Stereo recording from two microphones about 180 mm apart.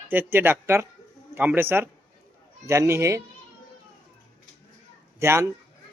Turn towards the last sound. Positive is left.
turn(degrees=-15)  # may be behind; listen again after turning